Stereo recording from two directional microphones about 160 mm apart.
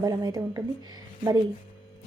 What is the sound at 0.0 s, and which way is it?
Speech, 20° right (ahead or behind).